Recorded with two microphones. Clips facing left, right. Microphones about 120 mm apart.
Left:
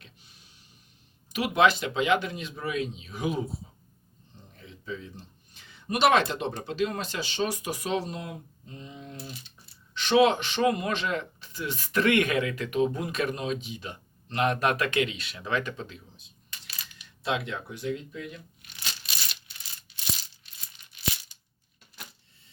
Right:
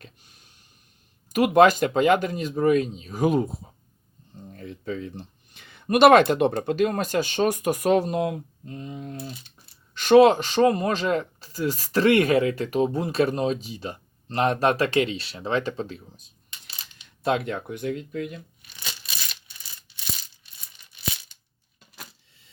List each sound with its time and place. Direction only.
1.3 s speech: 45° right (ahead or behind)
16.5 s coin: 25° right (ahead or behind)
17.2 s speech: 50° right (ahead or behind)